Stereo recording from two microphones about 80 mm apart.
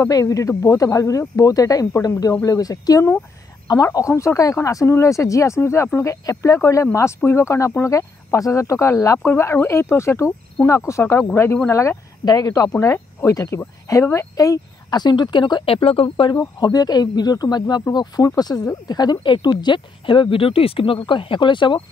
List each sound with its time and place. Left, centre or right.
0.1 s speech: left
12.3 s speech: left
12.7 s speech: left
16.5 s speech: left